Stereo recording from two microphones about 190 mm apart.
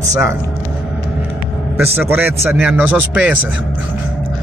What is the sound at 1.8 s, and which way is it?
A man's voice, 10° right (ahead or behind).